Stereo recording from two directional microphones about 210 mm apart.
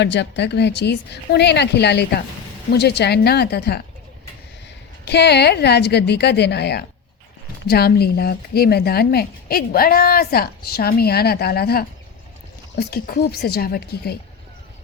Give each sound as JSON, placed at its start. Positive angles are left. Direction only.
{"t": 0.0, "sound": "a woman's voice", "side_deg": 55}
{"t": 5.0, "sound": "a woman's voice", "side_deg": 55}